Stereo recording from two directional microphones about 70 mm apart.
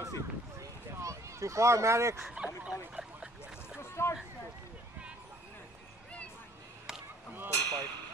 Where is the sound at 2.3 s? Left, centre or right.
Centre.